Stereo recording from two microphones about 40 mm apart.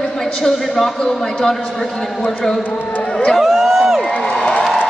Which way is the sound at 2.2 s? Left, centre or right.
Centre.